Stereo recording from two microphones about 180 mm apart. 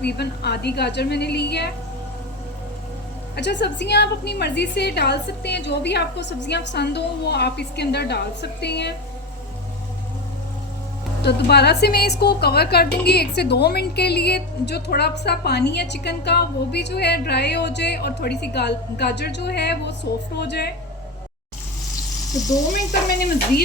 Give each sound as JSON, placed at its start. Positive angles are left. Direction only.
{"t": 0.0, "sound": "speech", "side_deg": 65}
{"t": 3.3, "sound": "speech", "side_deg": 70}
{"t": 11.2, "sound": "speech", "side_deg": 65}